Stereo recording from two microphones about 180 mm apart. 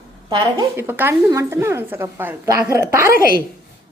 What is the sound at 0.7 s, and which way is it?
A woman's voice, 10° right (ahead or behind).